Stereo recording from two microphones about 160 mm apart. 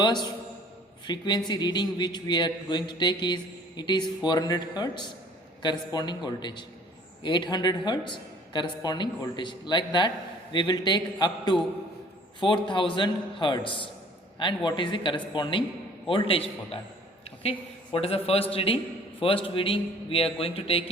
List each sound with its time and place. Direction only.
0.0 s a man's voice: 25° left (ahead or behind)